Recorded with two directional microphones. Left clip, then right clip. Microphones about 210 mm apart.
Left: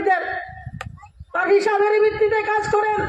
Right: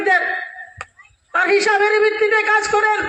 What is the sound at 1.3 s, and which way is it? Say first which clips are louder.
A man's voice: right 2 dB; 30° left (ahead or behind).